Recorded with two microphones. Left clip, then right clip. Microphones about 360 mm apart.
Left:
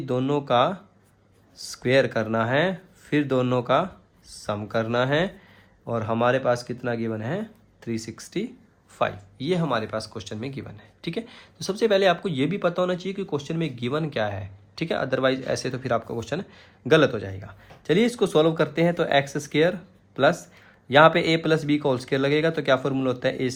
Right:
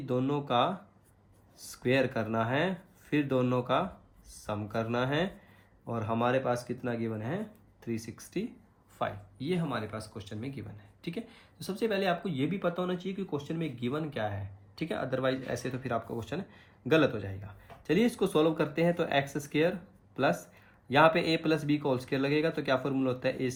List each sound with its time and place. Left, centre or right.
0.0 s speech: left